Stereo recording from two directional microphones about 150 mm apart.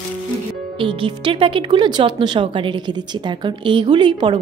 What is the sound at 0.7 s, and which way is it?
Speech, 35° right (ahead or behind).